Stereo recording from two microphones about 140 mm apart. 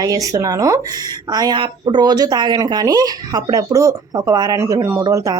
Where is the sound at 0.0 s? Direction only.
25° right (ahead or behind).